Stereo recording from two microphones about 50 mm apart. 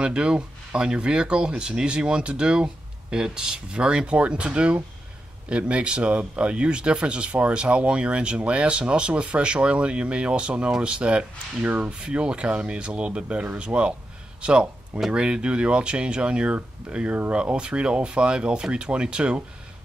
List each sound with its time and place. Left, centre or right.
0.0 s speech: centre